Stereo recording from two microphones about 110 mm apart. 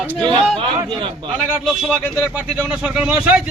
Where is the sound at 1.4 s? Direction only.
10° right (ahead or behind).